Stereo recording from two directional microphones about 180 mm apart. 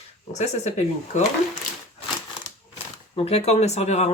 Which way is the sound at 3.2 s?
35° left (ahead or behind).